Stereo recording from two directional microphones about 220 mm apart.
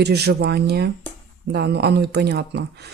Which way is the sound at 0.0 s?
50° right (ahead or behind).